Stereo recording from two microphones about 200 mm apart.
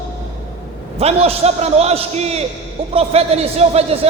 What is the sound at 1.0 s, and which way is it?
A man's voice, 30° right (ahead or behind).